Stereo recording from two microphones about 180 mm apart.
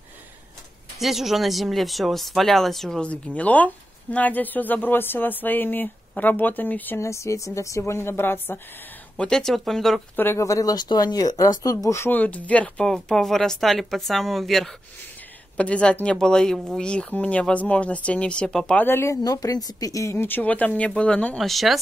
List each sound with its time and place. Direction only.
0.9 s speech: centre (ahead or behind)
10.1 s speech: 15° left (ahead or behind)